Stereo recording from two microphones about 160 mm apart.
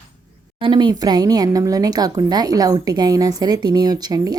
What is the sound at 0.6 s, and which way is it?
Speech, 30° right (ahead or behind).